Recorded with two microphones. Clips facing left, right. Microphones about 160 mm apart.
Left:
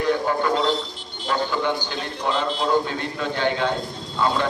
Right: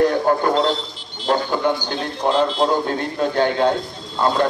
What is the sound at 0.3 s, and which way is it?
A man's voice, 50° right (ahead or behind).